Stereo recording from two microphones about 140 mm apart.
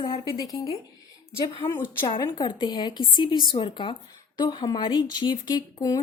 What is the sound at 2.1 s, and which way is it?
Speech, 30° left (ahead or behind).